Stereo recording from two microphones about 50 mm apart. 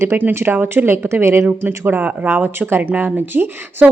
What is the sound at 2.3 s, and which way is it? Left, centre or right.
Speech, right.